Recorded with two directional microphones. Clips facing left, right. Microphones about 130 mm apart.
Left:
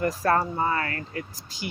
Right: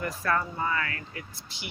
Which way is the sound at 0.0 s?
40° left (ahead or behind).